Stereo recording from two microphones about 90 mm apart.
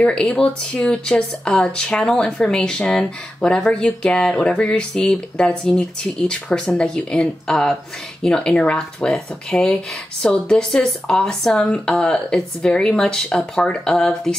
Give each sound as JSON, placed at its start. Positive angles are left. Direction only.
{"t": 0.0, "sound": "speech", "side_deg": 10}